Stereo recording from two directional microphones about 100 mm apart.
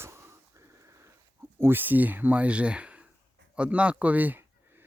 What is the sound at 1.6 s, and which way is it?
Speech, 20° right (ahead or behind).